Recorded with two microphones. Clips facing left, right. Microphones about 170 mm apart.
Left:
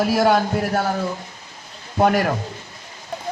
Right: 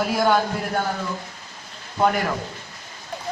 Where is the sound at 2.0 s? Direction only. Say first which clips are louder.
Left 4 dB; 45° left (ahead or behind).